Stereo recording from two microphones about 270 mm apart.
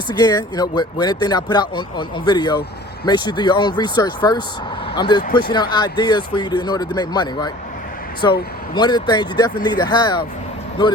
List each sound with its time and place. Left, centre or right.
0.1 s speech: centre